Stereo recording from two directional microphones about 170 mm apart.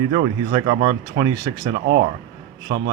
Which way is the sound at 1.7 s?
90° right.